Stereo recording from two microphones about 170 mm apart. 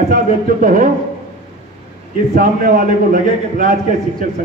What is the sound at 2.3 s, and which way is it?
A man's voice, 55° right (ahead or behind).